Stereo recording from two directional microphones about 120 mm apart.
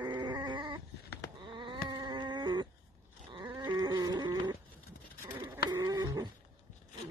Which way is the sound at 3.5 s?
35° right (ahead or behind).